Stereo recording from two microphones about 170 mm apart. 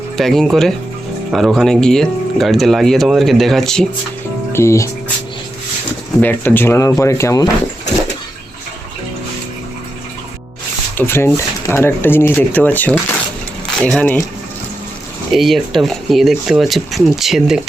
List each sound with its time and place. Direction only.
0.2 s speech: centre (ahead or behind)
4.5 s speech: 15° left (ahead or behind)
6.1 s speech: 10° left (ahead or behind)
10.9 s speech: 15° left (ahead or behind)
15.3 s speech: centre (ahead or behind)